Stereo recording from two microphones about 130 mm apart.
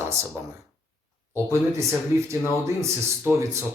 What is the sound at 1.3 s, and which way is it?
Speech, 20° right (ahead or behind).